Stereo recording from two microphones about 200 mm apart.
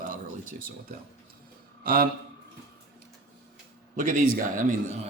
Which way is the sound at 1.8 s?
45° right (ahead or behind).